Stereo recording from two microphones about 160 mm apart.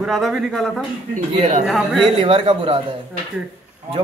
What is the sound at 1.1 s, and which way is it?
Speech, 45° right (ahead or behind).